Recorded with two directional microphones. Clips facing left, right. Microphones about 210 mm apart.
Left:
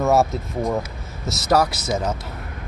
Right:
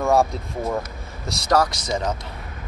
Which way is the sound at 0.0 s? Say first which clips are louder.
Left 1 dB; 5° left (ahead or behind).